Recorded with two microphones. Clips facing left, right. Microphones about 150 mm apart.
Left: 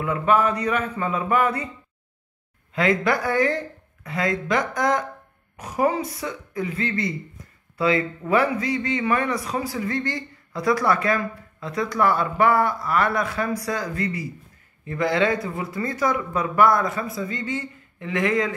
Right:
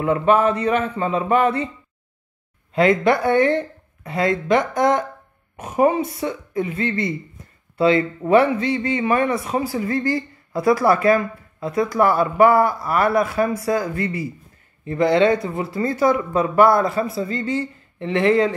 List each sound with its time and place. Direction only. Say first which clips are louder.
0.0 s a man's voice: right 4 dB; 30° right (ahead or behind)
2.7 s a man's voice: right 5 dB; 25° right (ahead or behind)